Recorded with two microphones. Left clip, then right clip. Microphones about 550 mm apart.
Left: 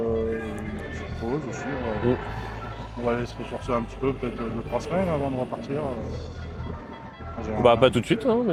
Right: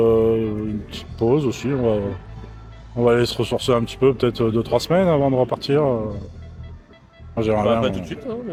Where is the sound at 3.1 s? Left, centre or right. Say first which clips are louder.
Right 10 dB; right.